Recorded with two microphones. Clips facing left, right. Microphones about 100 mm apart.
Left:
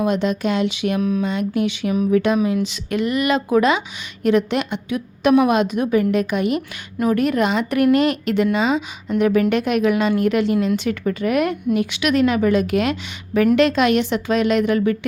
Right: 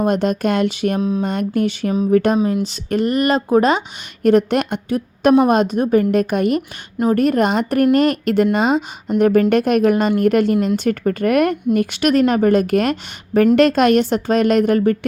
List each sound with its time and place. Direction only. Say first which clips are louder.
0.0 s a woman's voice: right 2 dB; 45° right (ahead or behind)